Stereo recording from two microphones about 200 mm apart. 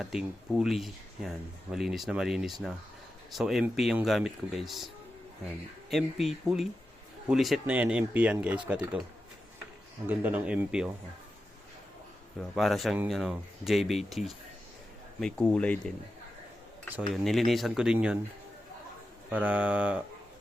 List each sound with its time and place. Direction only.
0.0 s speech: 5° right (ahead or behind)
5.9 s speech: centre (ahead or behind)
10.1 s speech: 10° right (ahead or behind)
12.4 s speech: centre (ahead or behind)
17.1 s speech: centre (ahead or behind)
19.3 s speech: 10° right (ahead or behind)